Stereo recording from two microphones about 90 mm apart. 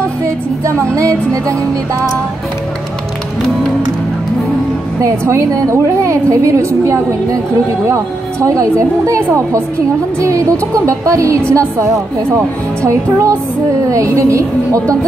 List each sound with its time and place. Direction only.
0.2 s music: 35° right (ahead or behind)
0.9 s a woman's voice: 35° right (ahead or behind)
5.0 s a woman's voice: 35° right (ahead or behind)